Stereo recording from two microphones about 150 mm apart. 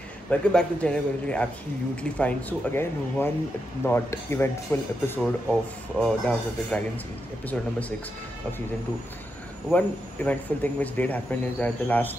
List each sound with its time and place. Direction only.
0.3 s a man's voice: 5° left (ahead or behind)
9.7 s a man's voice: 10° left (ahead or behind)